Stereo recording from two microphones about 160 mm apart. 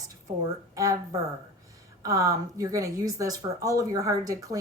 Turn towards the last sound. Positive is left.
turn(degrees=-20)  # may be behind; listen again after turning